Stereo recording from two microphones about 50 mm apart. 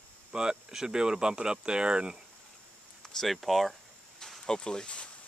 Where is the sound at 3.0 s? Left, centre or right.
Centre.